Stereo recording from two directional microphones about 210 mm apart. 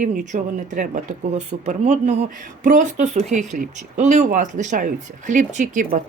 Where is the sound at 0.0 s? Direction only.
40° right (ahead or behind).